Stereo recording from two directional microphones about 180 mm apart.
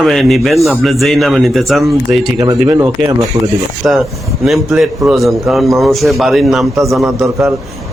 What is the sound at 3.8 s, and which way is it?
A man's voice, 5° right (ahead or behind).